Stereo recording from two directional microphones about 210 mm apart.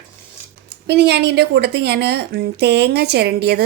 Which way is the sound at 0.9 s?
50° right (ahead or behind).